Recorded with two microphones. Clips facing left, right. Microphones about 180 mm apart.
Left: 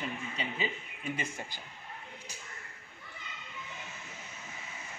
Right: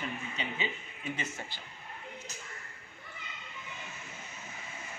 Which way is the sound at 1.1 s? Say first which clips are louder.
Left 1 dB; 10° left (ahead or behind).